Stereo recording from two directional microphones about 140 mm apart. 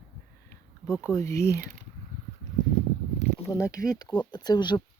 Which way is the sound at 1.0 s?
20° left (ahead or behind).